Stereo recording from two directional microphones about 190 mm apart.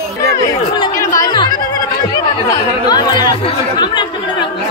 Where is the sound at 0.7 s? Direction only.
20° left (ahead or behind).